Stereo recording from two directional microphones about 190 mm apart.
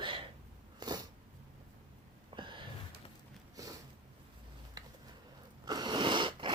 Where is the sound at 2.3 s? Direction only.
25° right (ahead or behind).